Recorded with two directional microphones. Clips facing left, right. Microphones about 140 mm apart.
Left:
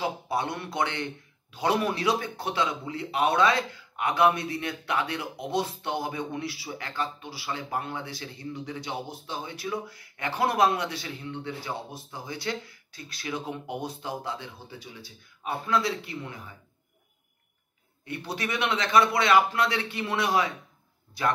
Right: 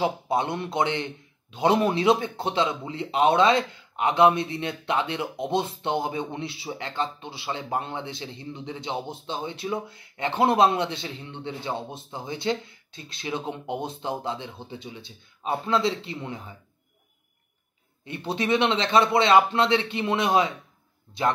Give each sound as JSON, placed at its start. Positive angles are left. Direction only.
{"t": 0.0, "sound": "a man's voice", "side_deg": -20}
{"t": 18.0, "sound": "a man's voice", "side_deg": -25}